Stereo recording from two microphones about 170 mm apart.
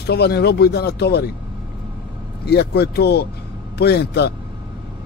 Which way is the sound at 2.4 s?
70° left (ahead or behind).